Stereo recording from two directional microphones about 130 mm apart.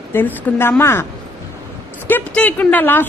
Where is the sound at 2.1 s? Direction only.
15° left (ahead or behind).